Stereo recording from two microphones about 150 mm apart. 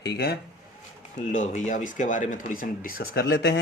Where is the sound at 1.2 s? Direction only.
60° left (ahead or behind).